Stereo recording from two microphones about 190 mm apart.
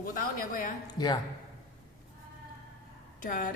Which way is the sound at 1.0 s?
20° left (ahead or behind).